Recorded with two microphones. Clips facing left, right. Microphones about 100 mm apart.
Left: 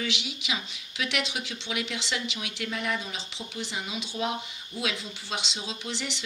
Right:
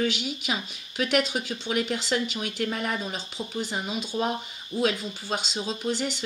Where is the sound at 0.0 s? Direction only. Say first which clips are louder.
Right 6 dB; 45° right (ahead or behind).